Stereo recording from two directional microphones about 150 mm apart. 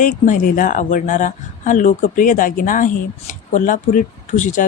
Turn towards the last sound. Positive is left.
turn(degrees=55)  # may be behind; listen again after turning